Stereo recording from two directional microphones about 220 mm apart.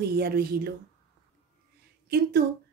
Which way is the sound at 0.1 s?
45° right (ahead or behind).